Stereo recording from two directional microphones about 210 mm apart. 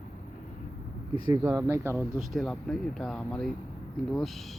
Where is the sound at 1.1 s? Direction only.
15° right (ahead or behind).